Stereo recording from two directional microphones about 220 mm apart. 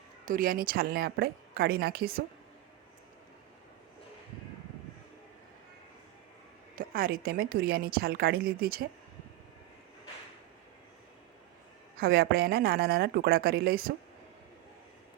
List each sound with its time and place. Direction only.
0.3 s a woman's voice: 40° right (ahead or behind)
6.7 s a woman's voice: 40° right (ahead or behind)
11.9 s a woman's voice: 45° right (ahead or behind)